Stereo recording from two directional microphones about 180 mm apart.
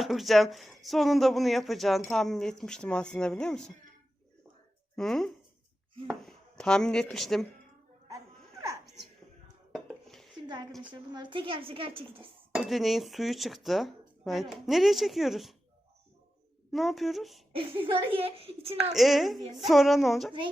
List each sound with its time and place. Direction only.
0.0 s speech: centre (ahead or behind)
4.9 s speech: centre (ahead or behind)
8.5 s a sound: 15° right (ahead or behind)
9.7 s dishes: centre (ahead or behind)
10.3 s a sound: 25° right (ahead or behind)
10.7 s speech: centre (ahead or behind)
11.1 s a woman's voice: 25° right (ahead or behind)
12.5 s speech: centre (ahead or behind)
16.7 s speech: centre (ahead or behind)
17.5 s a child's voice: 30° right (ahead or behind)
18.9 s speech: centre (ahead or behind)